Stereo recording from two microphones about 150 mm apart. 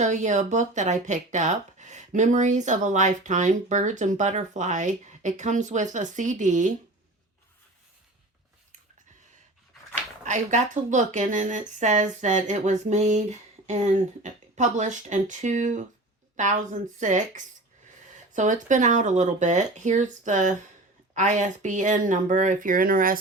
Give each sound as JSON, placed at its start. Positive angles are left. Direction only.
{"t": 0.0, "sound": "speech", "side_deg": -55}
{"t": 10.2, "sound": "speech", "side_deg": -55}